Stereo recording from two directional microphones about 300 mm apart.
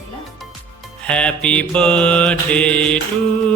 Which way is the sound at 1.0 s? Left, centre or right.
Centre.